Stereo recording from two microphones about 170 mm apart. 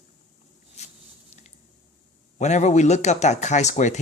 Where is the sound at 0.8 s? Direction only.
40° left (ahead or behind).